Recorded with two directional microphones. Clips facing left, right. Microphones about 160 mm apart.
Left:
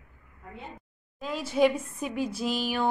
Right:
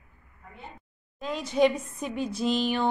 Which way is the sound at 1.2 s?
5° left (ahead or behind).